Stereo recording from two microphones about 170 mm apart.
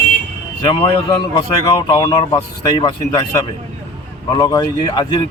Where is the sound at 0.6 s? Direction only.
30° left (ahead or behind).